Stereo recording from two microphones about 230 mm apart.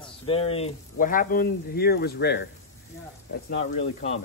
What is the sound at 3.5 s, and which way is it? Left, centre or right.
Speech, left.